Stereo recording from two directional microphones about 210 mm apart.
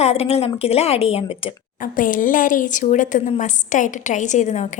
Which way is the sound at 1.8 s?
40° left (ahead or behind).